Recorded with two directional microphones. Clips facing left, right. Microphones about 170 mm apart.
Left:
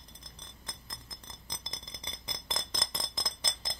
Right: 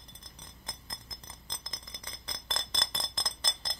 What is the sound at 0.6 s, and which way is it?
Glass, 15° right (ahead or behind).